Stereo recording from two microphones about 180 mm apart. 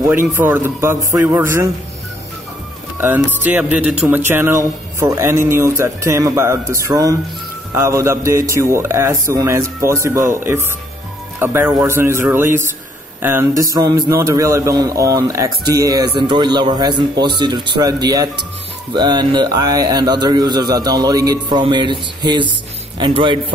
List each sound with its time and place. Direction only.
0.0 s a man's voice: 15° right (ahead or behind)
3.4 s a man's voice: 10° right (ahead or behind); by 23.4 s 25° right (ahead or behind)